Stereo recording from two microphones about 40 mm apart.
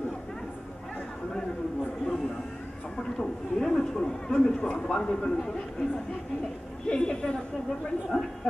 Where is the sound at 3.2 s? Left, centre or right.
Centre.